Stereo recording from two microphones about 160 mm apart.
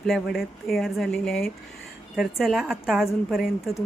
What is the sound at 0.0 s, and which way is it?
A woman's voice, centre (ahead or behind).